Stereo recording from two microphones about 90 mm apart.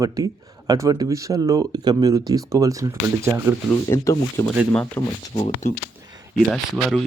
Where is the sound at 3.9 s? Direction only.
35° left (ahead or behind).